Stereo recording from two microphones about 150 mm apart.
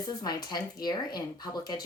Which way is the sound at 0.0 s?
25° left (ahead or behind).